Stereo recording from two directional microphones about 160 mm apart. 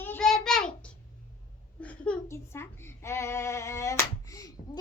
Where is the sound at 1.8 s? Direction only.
10° left (ahead or behind).